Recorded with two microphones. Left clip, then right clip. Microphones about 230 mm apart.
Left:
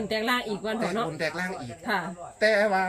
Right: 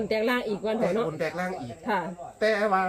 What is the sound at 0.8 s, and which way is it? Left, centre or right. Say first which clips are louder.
Speech: right 1 dB; right.